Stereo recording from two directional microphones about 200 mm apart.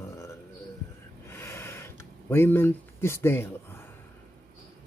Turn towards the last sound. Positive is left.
turn(degrees=10)  # may be behind; listen again after turning